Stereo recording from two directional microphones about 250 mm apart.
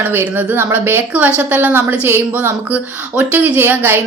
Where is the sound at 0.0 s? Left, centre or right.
Centre.